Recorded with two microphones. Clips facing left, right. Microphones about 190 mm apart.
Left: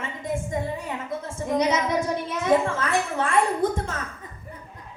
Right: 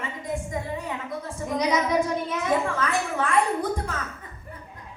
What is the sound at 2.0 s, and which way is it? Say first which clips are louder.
Speech: left 2 dB; centre (ahead or behind).